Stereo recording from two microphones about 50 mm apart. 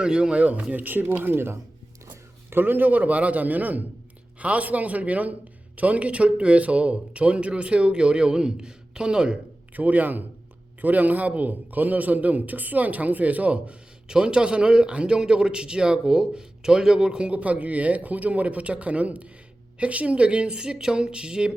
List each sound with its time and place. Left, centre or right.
0.0 s a man's voice: centre
9.7 s a man's voice: right
14.1 s a man's voice: centre